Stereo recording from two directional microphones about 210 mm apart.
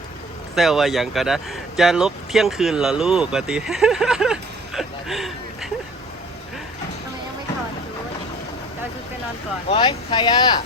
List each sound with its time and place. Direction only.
0.5 s speech: centre (ahead or behind)
9.6 s speech: 25° left (ahead or behind)